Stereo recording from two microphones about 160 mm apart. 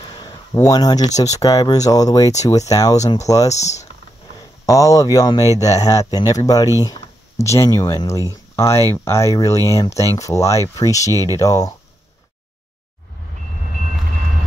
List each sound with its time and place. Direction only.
0.2 s speech: 25° left (ahead or behind)
3.5 s speech: 45° left (ahead or behind)
4.6 s speech: 20° left (ahead or behind)